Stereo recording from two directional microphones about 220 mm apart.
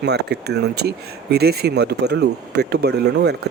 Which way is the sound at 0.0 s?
50° right (ahead or behind).